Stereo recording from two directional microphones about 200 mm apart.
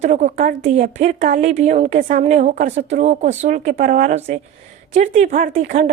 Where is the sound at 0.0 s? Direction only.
40° right (ahead or behind).